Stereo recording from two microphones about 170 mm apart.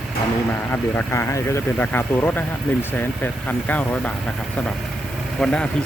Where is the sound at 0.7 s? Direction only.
15° left (ahead or behind).